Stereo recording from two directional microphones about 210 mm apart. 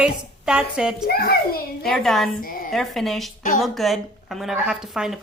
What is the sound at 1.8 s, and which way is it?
Speech, centre (ahead or behind).